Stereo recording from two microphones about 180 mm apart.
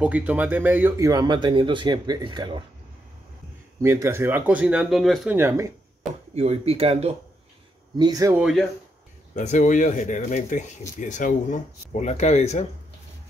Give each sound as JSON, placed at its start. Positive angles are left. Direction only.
{"t": 0.0, "sound": "speech", "side_deg": -10}
{"t": 3.8, "sound": "speech", "side_deg": -15}
{"t": 5.3, "sound": "speech", "side_deg": -15}
{"t": 6.3, "sound": "speech", "side_deg": -35}
{"t": 8.0, "sound": "speech", "side_deg": -20}
{"t": 8.4, "sound": "speech", "side_deg": 0}
{"t": 9.3, "sound": "speech", "side_deg": 40}